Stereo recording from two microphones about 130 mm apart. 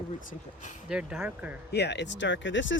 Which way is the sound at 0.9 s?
5° right (ahead or behind).